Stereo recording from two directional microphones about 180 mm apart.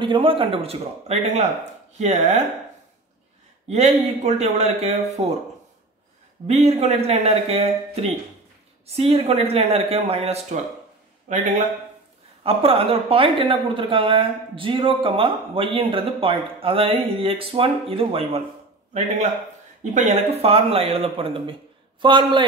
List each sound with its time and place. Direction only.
0.0 s speech: 25° right (ahead or behind)
3.6 s speech: 35° right (ahead or behind)
6.4 s speech: 35° right (ahead or behind)
12.4 s speech: 30° right (ahead or behind)
19.8 s speech: 40° right (ahead or behind)